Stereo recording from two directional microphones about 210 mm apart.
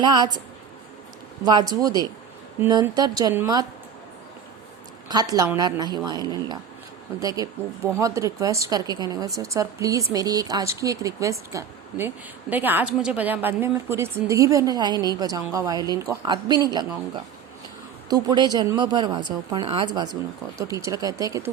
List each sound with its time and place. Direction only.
0.0 s speech: 20° right (ahead or behind)
1.5 s speech: 20° right (ahead or behind)
5.0 s speech: 20° right (ahead or behind)
18.1 s speech: 20° right (ahead or behind)